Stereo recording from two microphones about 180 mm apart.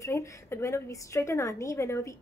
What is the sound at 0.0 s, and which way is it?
A woman's voice, 15° left (ahead or behind).